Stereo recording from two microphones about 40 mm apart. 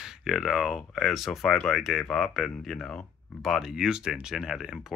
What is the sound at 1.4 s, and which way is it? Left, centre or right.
Speech, centre.